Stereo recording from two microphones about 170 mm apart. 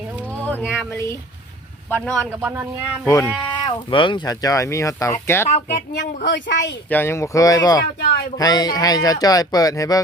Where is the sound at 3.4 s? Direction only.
25° left (ahead or behind).